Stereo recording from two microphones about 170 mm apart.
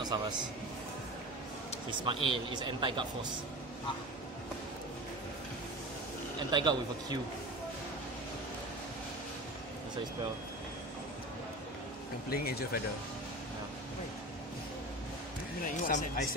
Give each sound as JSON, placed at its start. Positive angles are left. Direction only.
{"t": 0.0, "sound": "a man's voice", "side_deg": -25}
{"t": 1.9, "sound": "speech", "side_deg": -30}
{"t": 6.5, "sound": "speech", "side_deg": -25}
{"t": 12.3, "sound": "speech", "side_deg": 65}
{"t": 15.6, "sound": "speech", "side_deg": 50}